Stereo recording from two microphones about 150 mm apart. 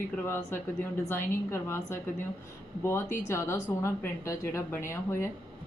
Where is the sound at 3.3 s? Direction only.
15° left (ahead or behind).